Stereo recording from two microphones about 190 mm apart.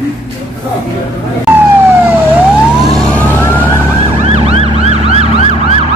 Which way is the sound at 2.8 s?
5° left (ahead or behind).